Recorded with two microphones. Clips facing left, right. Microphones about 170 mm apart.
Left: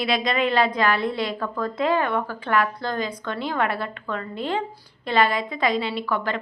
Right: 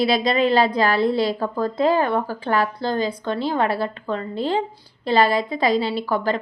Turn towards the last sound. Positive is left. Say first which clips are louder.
# right 4 dB
turn(degrees=-35)  # may be behind; listen again after turning